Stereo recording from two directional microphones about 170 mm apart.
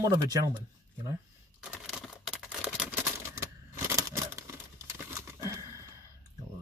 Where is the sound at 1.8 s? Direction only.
Centre (ahead or behind).